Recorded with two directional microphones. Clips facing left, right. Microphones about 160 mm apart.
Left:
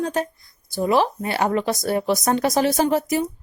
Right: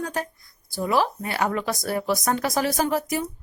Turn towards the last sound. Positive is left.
turn(degrees=25)  # may be behind; listen again after turning